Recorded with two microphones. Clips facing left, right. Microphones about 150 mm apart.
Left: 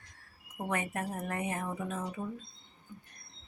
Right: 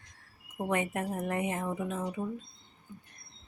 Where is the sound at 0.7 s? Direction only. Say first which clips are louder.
Right 3 dB; 20° right (ahead or behind).